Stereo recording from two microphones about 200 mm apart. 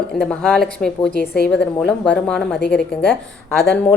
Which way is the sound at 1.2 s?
50° left (ahead or behind).